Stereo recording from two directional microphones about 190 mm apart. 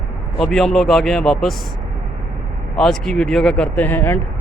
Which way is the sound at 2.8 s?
5° left (ahead or behind).